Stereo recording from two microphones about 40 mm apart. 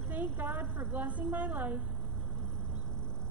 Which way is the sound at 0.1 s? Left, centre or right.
Right.